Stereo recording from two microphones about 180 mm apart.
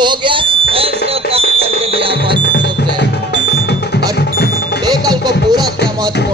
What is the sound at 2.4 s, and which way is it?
Music, 80° left.